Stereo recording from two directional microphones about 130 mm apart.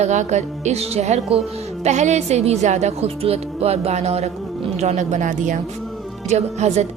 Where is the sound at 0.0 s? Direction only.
65° right (ahead or behind).